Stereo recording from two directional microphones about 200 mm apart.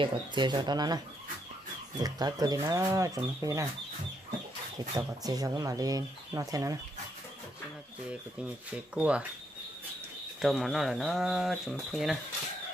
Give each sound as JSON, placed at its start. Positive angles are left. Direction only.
{"t": 0.0, "sound": "speech", "side_deg": -25}
{"t": 4.9, "sound": "speech", "side_deg": -20}
{"t": 8.7, "sound": "speech", "side_deg": -5}
{"t": 10.4, "sound": "speech", "side_deg": 0}